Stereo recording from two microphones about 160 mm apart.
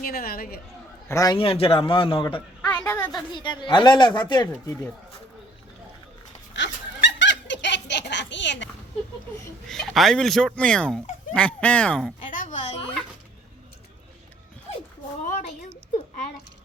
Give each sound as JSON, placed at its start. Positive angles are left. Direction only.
{"t": 0.0, "sound": "a woman's voice", "side_deg": 65}
{"t": 1.0, "sound": "speech", "side_deg": 20}
{"t": 1.4, "sound": "a man's voice", "side_deg": 35}
{"t": 2.6, "sound": "a sound", "side_deg": 10}
{"t": 3.2, "sound": "speech", "side_deg": 30}
{"t": 7.0, "sound": "fowl", "side_deg": 90}
{"t": 9.6, "sound": "speech", "side_deg": 0}
{"t": 12.3, "sound": "a sound", "side_deg": 50}
{"t": 15.2, "sound": "a sound", "side_deg": 55}